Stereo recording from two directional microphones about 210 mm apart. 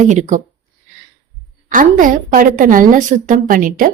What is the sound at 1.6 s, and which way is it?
Speech, 40° right (ahead or behind).